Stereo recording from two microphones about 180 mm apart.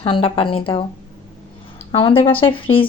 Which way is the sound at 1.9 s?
30° left (ahead or behind).